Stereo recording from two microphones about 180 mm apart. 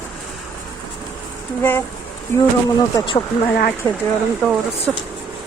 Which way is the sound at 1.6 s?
10° left (ahead or behind).